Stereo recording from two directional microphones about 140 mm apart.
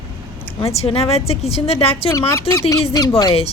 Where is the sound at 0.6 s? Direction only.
45° left (ahead or behind).